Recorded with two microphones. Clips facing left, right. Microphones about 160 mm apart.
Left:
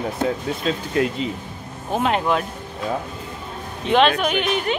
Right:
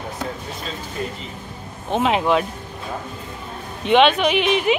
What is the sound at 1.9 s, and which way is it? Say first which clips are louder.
Speech: right 2 dB; centre (ahead or behind).